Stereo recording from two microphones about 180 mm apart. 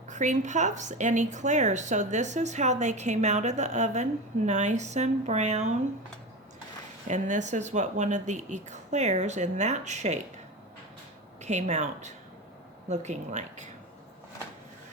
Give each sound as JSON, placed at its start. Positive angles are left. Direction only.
{"t": 0.1, "sound": "a woman's voice", "side_deg": -40}
{"t": 7.1, "sound": "a woman's voice", "side_deg": -40}
{"t": 11.4, "sound": "a woman's voice", "side_deg": -40}